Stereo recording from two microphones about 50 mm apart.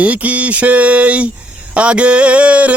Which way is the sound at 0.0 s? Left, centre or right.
Right.